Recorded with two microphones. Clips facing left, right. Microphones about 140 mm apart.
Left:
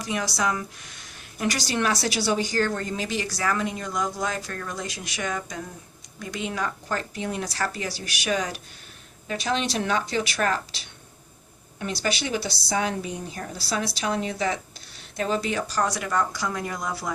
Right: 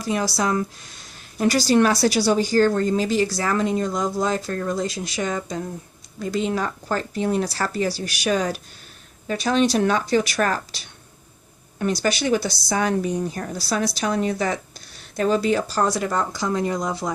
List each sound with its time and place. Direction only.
0.0 s speech: 35° right (ahead or behind)
12.0 s a woman's voice: 45° right (ahead or behind); by 17.1 s 20° right (ahead or behind)